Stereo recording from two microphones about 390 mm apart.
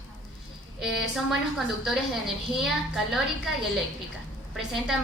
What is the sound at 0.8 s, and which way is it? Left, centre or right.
Speech, centre.